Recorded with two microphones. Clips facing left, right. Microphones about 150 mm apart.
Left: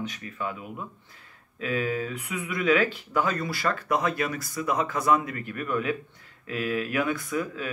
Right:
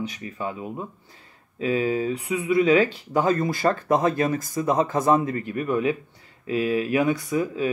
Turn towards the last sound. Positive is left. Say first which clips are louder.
# right 6 dB
turn(degrees=-25)  # may be behind; listen again after turning